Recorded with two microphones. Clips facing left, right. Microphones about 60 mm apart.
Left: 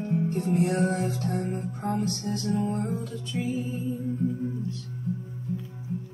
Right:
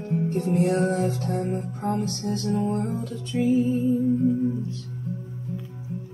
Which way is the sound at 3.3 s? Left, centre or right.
Centre.